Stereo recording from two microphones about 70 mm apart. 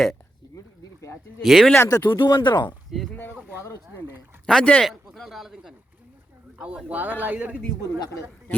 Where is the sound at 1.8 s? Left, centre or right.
Left.